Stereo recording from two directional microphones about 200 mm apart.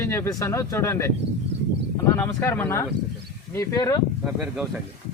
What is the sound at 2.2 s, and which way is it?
Speech, 15° left (ahead or behind).